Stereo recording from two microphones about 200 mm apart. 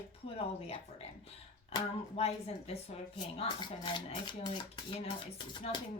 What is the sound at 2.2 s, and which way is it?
Speech, 30° left (ahead or behind).